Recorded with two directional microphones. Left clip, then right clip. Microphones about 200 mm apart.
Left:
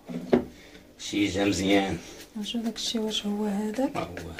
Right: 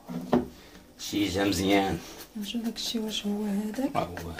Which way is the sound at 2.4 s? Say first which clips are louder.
Left 2 dB; 5° left (ahead or behind).